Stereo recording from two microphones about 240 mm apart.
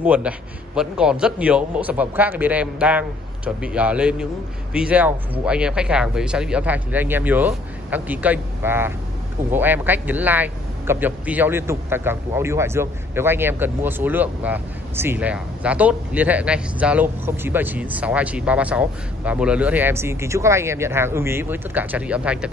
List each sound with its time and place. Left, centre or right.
0.0 s a man's voice: centre